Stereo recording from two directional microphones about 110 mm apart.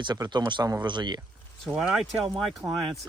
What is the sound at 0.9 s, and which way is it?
Speech, 40° right (ahead or behind).